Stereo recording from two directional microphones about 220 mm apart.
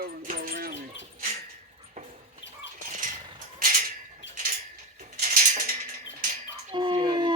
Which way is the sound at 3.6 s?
40° right (ahead or behind).